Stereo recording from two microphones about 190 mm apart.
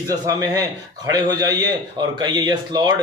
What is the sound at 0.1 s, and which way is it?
A man's voice, 20° right (ahead or behind).